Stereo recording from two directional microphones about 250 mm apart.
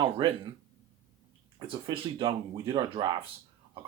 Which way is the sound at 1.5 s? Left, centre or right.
Centre.